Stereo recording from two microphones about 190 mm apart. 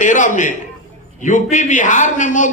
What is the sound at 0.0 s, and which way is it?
A man's voice, 40° left (ahead or behind).